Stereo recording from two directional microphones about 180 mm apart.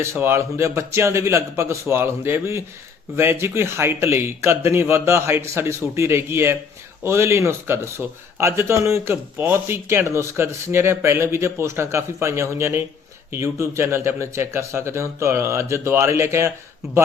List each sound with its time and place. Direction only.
0.0 s speech: 15° right (ahead or behind)